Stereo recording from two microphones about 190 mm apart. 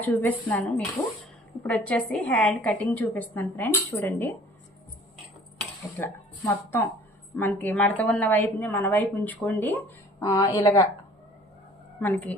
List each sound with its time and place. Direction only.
0.0 s a woman's voice: 10° left (ahead or behind)
1.6 s a woman's voice: 10° left (ahead or behind)
6.0 s a woman's voice: 15° left (ahead or behind)
11.9 s a woman's voice: 10° left (ahead or behind)